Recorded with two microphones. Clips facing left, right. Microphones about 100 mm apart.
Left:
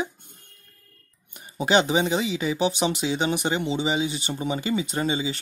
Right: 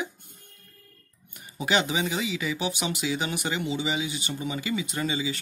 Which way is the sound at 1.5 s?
30° left (ahead or behind).